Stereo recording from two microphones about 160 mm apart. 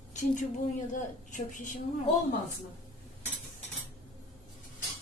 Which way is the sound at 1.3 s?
50° left (ahead or behind).